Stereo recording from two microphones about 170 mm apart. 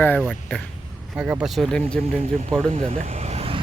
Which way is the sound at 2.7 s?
35° right (ahead or behind).